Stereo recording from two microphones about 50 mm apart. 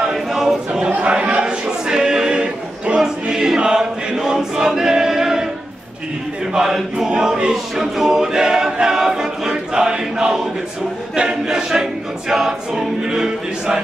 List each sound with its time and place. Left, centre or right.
0.0 s choir: centre
0.8 s a sound: right
3.0 s choir: centre
6.5 s a capella: centre